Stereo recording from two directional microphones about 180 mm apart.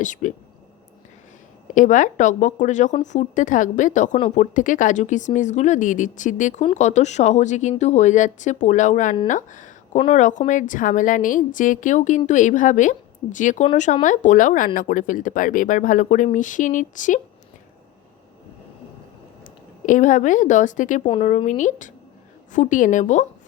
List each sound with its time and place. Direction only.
0.0 s a woman's voice: 45° left (ahead or behind)
1.7 s a woman's voice: 45° left (ahead or behind)
19.8 s a woman's voice: 45° left (ahead or behind)
21.1 s a woman's voice: 35° left (ahead or behind)